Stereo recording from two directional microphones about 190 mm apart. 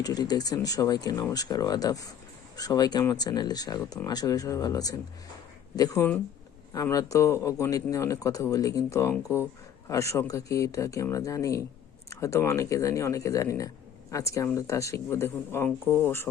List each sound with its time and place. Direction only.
0.0 s speech: 20° left (ahead or behind)